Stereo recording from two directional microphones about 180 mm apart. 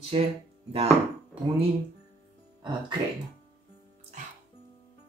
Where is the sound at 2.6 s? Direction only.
25° right (ahead or behind).